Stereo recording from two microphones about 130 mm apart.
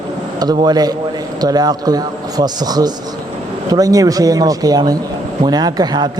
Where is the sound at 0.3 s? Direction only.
30° right (ahead or behind).